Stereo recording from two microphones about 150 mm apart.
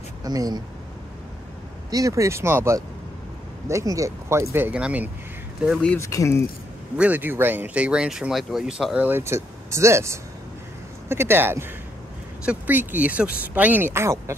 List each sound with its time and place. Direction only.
0.2 s speech: 25° right (ahead or behind)
1.9 s speech: 25° right (ahead or behind); by 5.9 s centre (ahead or behind)
5.9 s speech: 20° left (ahead or behind)
7.0 s speech: 10° right (ahead or behind)